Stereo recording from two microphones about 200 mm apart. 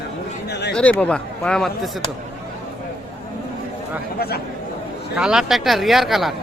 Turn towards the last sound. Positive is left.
turn(degrees=0)  # may be behind; listen again after turning